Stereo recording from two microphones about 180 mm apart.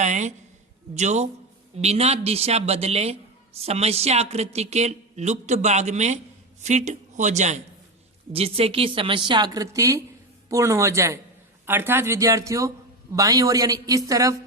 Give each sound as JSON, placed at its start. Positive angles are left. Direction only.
{"t": 0.0, "sound": "a woman's voice", "side_deg": -40}